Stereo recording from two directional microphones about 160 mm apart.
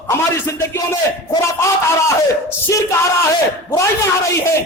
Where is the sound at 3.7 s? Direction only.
20° left (ahead or behind).